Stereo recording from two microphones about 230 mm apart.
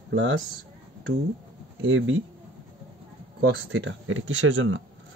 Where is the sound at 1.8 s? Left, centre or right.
Right.